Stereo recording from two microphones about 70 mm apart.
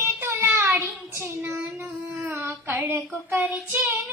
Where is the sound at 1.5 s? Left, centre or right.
Right.